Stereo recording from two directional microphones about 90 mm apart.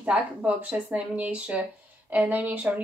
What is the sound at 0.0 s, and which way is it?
A woman's voice, 15° right (ahead or behind).